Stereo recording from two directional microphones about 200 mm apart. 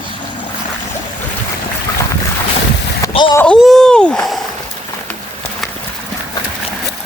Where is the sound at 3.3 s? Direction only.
5° left (ahead or behind).